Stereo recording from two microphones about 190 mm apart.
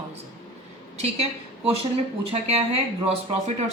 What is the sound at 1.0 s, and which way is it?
Speech, 30° right (ahead or behind).